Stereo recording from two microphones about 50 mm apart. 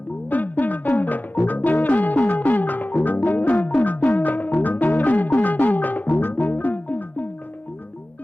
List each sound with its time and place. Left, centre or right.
0.3 s music: left